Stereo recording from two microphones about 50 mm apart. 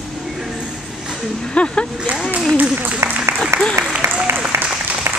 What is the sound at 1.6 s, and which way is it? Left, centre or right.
Speech, left.